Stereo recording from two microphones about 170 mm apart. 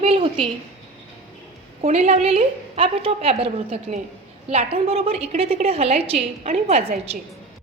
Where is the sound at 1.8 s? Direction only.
40° right (ahead or behind).